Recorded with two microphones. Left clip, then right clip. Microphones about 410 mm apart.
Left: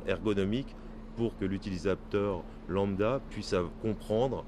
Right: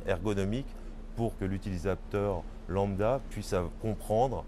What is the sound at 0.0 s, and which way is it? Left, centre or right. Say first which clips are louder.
Speech: left 1 dB; centre.